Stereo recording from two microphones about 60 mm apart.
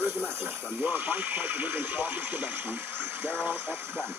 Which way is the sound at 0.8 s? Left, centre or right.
Right.